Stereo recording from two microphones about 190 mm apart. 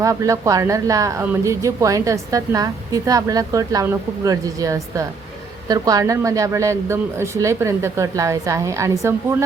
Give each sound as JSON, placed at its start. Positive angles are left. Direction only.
{"t": 0.0, "sound": "a woman's voice", "side_deg": -15}